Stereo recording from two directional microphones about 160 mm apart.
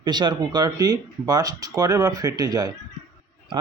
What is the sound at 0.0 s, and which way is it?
A man's voice, 25° right (ahead or behind).